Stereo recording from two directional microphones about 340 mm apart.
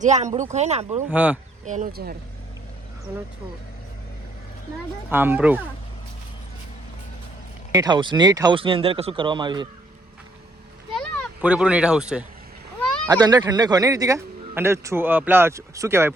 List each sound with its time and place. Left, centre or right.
0.0 s speech: right
1.1 s speech: centre
1.6 s speech: right
5.0 s speech: centre
7.7 s speech: centre
10.9 s a child's voice: centre